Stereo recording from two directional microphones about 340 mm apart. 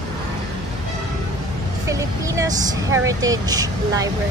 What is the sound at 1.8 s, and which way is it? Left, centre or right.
Speech, centre.